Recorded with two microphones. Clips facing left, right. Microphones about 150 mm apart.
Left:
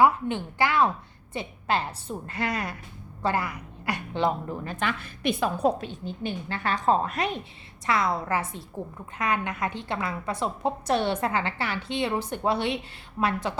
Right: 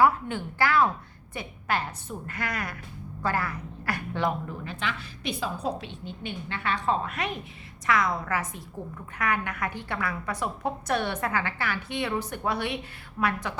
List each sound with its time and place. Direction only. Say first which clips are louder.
0.0 s a woman's voice: left 1 dB; 20° left (ahead or behind)
4.6 s a woman's voice: left 3 dB; 45° left (ahead or behind); by 13.5 s 25° left (ahead or behind)